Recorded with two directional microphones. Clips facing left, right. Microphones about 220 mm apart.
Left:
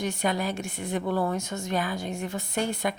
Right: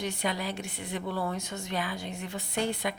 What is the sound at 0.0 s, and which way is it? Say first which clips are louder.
A woman's voice: left 4 dB; 45° left (ahead or behind).